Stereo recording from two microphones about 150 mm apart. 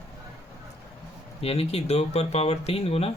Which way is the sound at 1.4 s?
40° left (ahead or behind).